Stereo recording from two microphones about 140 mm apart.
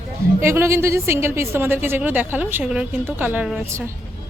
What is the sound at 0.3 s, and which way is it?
A woman's voice, 20° right (ahead or behind).